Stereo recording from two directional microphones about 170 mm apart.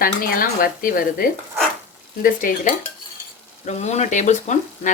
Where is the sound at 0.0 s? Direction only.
60° left (ahead or behind).